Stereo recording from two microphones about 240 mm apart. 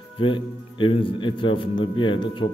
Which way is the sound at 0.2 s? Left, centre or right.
Left.